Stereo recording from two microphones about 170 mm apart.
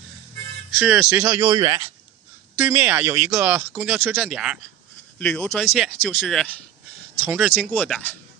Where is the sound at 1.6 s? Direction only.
30° right (ahead or behind).